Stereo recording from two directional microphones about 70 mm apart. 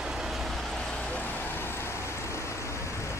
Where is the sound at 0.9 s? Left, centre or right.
Left.